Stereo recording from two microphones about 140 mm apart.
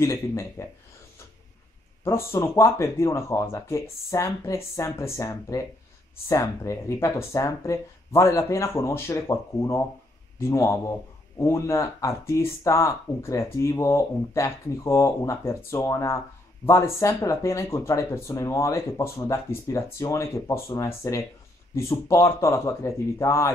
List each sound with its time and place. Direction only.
0.0 s speech: 20° left (ahead or behind)
2.0 s speech: 20° left (ahead or behind)